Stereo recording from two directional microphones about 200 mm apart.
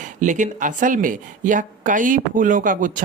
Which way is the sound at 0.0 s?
40° right (ahead or behind).